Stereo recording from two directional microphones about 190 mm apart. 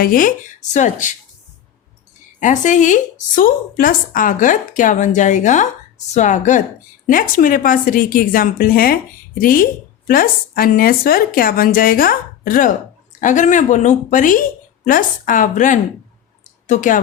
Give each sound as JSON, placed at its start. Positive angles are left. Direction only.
{"t": 0.0, "sound": "speech", "side_deg": 45}
{"t": 2.4, "sound": "speech", "side_deg": 40}